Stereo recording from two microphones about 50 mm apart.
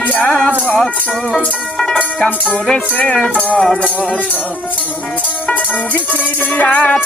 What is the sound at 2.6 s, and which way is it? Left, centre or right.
Speech, left.